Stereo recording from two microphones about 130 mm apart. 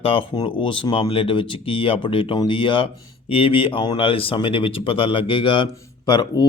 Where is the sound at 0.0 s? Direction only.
45° left (ahead or behind).